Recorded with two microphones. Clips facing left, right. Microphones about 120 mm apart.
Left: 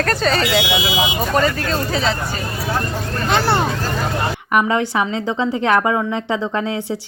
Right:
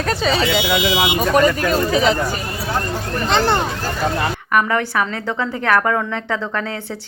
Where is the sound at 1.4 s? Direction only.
15° right (ahead or behind).